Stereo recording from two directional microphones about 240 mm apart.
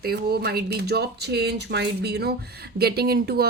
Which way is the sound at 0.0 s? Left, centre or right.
Right.